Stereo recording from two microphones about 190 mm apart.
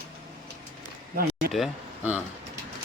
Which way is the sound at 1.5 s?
5° right (ahead or behind).